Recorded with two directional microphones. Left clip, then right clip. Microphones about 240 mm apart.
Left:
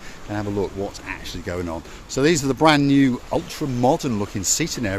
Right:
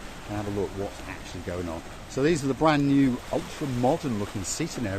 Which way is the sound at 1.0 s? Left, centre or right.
Left.